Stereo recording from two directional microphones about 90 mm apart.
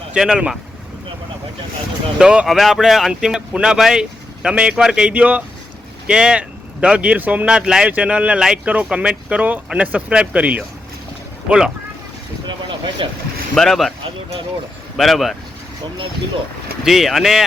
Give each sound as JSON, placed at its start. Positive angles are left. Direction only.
{"t": 0.1, "sound": "speech", "side_deg": -10}
{"t": 2.1, "sound": "speech", "side_deg": -10}
{"t": 12.5, "sound": "a sound", "side_deg": -65}
{"t": 13.6, "sound": "speech", "side_deg": 0}
{"t": 14.9, "sound": "speech", "side_deg": 0}
{"t": 16.8, "sound": "speech", "side_deg": 0}